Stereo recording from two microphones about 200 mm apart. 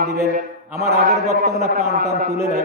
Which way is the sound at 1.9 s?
45° right (ahead or behind).